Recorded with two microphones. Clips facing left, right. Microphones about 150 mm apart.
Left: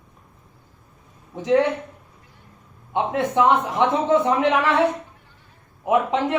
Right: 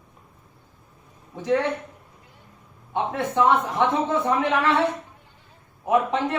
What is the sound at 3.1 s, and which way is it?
A man's voice, 15° left (ahead or behind).